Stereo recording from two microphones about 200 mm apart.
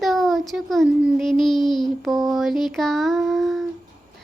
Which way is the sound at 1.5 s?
20° left (ahead or behind).